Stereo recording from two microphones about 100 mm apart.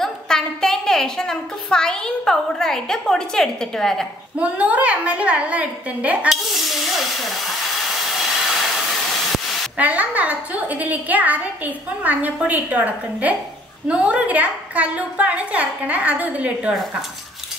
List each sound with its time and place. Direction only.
0.0 s a woman's voice: 5° left (ahead or behind)
4.4 s a woman's voice: 15° right (ahead or behind)
6.2 s a sound: centre (ahead or behind)
7.9 s hair dryer: centre (ahead or behind)
9.8 s a woman's voice: 15° right (ahead or behind)